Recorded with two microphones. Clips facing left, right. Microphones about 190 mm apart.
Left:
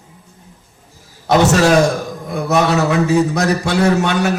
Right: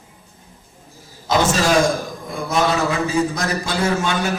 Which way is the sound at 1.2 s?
65° left (ahead or behind).